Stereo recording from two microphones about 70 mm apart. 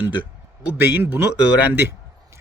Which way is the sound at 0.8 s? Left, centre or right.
Right.